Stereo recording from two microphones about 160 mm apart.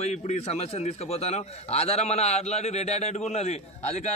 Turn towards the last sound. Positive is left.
turn(degrees=45)  # may be behind; listen again after turning